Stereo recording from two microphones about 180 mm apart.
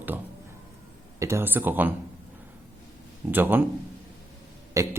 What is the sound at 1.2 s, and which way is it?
Speech, 15° right (ahead or behind).